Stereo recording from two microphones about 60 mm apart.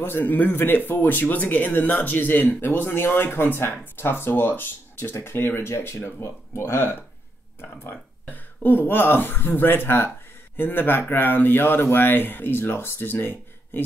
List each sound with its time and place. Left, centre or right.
0.0 s speech: left